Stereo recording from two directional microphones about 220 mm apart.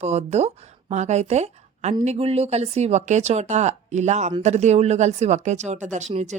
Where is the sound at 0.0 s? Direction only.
30° right (ahead or behind).